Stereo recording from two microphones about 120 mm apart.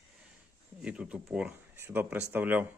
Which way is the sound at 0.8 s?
10° right (ahead or behind).